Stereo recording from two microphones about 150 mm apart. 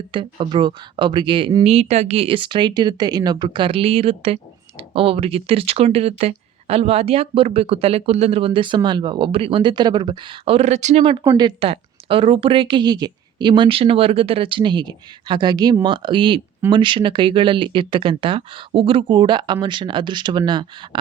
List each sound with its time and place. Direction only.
0.1 s speech: 35° right (ahead or behind); by 11.0 s 50° right (ahead or behind)
11.0 s speech: 35° right (ahead or behind)